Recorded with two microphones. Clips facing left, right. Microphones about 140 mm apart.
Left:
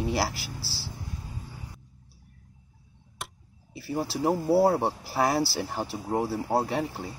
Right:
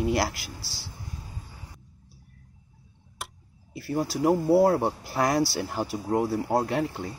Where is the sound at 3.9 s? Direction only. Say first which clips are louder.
Right 2 dB; 30° left (ahead or behind).